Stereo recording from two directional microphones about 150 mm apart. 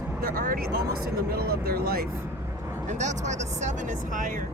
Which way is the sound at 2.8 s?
50° right (ahead or behind).